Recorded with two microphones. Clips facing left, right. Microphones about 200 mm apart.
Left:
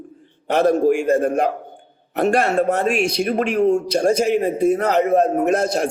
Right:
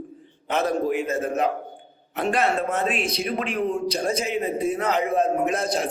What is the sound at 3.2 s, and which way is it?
A man's voice, 45° left (ahead or behind).